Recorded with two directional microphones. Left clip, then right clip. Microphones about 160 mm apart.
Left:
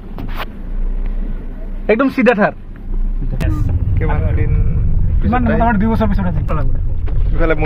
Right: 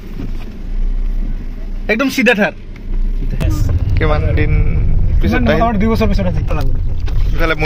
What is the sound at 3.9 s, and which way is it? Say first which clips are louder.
Speech: right 6 dB; 30° right (ahead or behind).